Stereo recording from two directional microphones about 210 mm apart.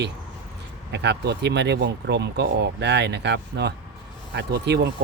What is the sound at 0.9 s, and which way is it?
Speech, 55° right (ahead or behind).